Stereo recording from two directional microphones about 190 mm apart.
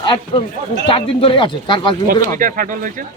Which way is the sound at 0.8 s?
30° left (ahead or behind).